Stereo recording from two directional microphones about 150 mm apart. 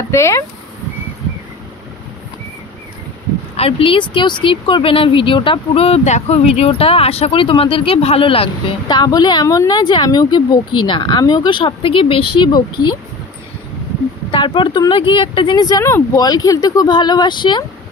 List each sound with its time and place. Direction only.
0.1 s speech: 20° left (ahead or behind)
3.5 s speech: 40° left (ahead or behind)
14.3 s speech: 35° left (ahead or behind)